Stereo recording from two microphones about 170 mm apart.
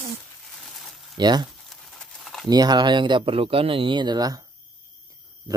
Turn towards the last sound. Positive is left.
turn(degrees=-25)  # may be behind; listen again after turning